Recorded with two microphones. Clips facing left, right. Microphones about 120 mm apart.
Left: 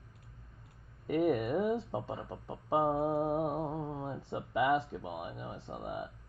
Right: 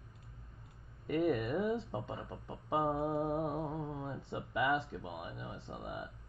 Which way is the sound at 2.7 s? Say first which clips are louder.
Left 4 dB; 25° left (ahead or behind).